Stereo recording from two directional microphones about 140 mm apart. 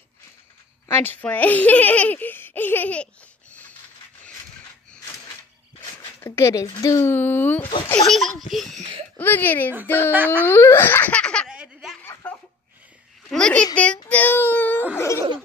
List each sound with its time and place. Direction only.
0.8 s speech: 15° left (ahead or behind)
6.1 s speech: 20° left (ahead or behind)
8.1 s a child's voice: centre (ahead or behind)
9.2 s speech: 15° left (ahead or behind)
10.1 s speech: 15° right (ahead or behind)
10.4 s speech: 15° left (ahead or behind)
11.4 s snicker: 5° right (ahead or behind)
11.9 s snicker: 15° left (ahead or behind)
13.3 s babbling: 5° left (ahead or behind)
14.0 s wail: 10° left (ahead or behind)
15.0 s laughter: 20° left (ahead or behind)